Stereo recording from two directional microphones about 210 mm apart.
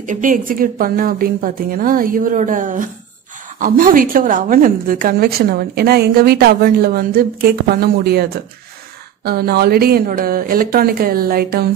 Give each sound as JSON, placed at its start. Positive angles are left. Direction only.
{"t": 0.0, "sound": "a woman's voice", "side_deg": -40}